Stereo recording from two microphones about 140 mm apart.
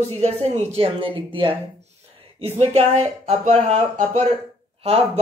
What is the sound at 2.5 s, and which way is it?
A woman's voice, 50° right (ahead or behind).